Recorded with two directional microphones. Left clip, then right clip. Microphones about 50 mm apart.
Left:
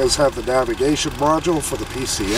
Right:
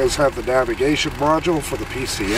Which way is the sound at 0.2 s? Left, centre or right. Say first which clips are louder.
Even; centre.